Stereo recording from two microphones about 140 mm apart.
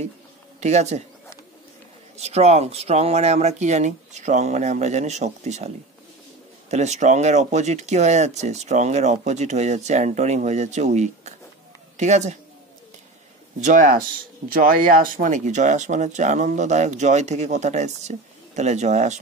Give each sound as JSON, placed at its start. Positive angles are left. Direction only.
{"t": 0.6, "sound": "speech", "side_deg": -55}
{"t": 2.1, "sound": "speech", "side_deg": -50}
{"t": 6.7, "sound": "speech", "side_deg": -55}
{"t": 13.6, "sound": "speech", "side_deg": -60}
{"t": 14.5, "sound": "speech", "side_deg": -90}